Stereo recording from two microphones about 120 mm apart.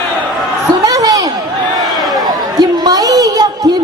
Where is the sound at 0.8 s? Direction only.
30° right (ahead or behind).